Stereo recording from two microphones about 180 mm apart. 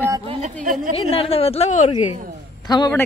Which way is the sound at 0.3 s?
40° right (ahead or behind).